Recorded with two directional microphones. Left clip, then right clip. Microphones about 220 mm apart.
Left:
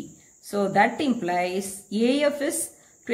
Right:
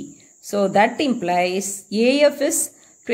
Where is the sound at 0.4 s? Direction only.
35° right (ahead or behind).